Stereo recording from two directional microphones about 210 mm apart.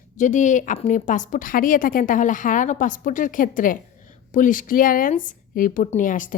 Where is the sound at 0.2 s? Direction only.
35° left (ahead or behind).